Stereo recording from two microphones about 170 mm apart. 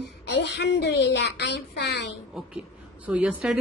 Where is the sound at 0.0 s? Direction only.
80° left.